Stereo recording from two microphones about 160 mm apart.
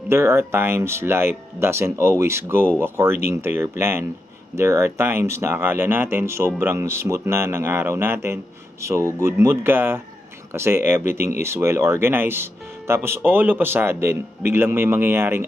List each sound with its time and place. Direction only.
0.1 s speech: 15° right (ahead or behind)